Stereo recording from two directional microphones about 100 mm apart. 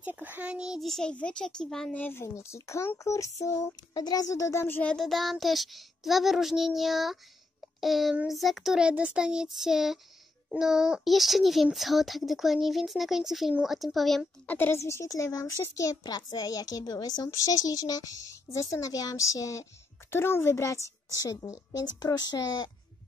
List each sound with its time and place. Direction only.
0.0 s speech: 15° right (ahead or behind); by 2.0 s 5° left (ahead or behind)
2.0 s a child's voice: 20° left (ahead or behind)
4.8 s speech: 5° left (ahead or behind)
14.4 s speech: 20° left (ahead or behind)
14.9 s a child's voice: 30° left (ahead or behind)